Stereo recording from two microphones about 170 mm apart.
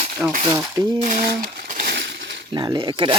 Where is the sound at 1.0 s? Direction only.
50° right (ahead or behind).